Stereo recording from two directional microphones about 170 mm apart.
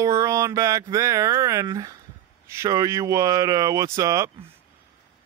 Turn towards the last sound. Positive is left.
turn(degrees=-20)  # may be behind; listen again after turning